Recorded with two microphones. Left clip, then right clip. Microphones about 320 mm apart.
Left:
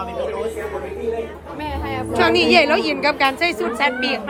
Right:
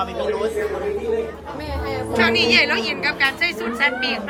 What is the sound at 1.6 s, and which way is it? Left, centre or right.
Music, left.